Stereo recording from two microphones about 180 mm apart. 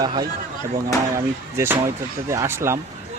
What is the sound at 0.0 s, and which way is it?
Speech, 20° right (ahead or behind).